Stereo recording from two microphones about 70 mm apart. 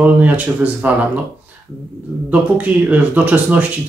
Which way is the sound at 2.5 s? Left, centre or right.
Right.